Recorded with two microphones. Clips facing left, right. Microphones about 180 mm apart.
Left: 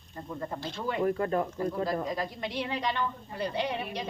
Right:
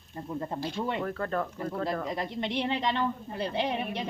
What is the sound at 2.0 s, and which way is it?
A woman's voice, 25° right (ahead or behind).